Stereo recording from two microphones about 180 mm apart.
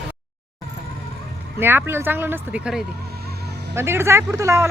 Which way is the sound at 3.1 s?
60° right (ahead or behind).